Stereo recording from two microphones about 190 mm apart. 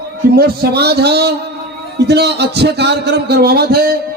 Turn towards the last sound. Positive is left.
turn(degrees=-55)  # may be behind; listen again after turning